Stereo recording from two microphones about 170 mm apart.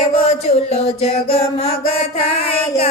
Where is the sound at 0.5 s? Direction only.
40° left (ahead or behind).